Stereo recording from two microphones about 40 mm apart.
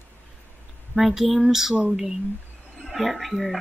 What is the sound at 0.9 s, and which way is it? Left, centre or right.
Speech, centre.